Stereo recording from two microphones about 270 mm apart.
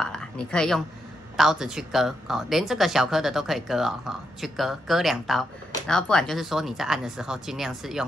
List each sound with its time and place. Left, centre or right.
0.0 s a woman's voice: centre